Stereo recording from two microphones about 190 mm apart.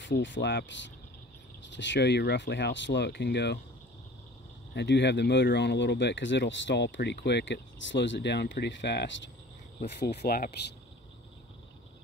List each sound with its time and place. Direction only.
0.0 s speech: 70° left (ahead or behind)
4.7 s speech: 65° left (ahead or behind)
9.8 s speech: 55° left (ahead or behind)